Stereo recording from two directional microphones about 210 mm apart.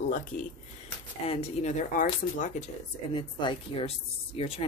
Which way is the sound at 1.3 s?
30° left (ahead or behind).